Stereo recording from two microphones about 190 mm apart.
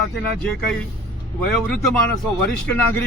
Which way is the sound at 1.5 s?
Centre (ahead or behind).